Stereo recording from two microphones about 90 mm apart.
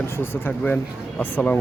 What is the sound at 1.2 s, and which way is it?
Speech, 20° left (ahead or behind).